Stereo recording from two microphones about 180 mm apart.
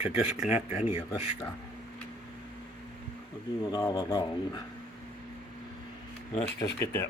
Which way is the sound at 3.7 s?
20° left (ahead or behind).